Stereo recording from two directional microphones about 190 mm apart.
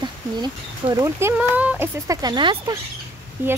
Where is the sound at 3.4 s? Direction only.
10° right (ahead or behind).